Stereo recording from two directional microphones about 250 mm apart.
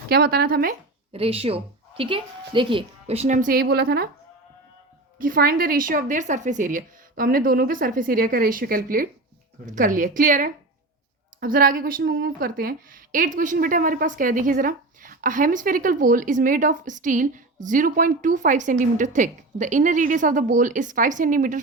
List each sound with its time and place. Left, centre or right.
0.1 s a woman's voice: right
1.1 s a woman's voice: right
5.1 s a woman's voice: right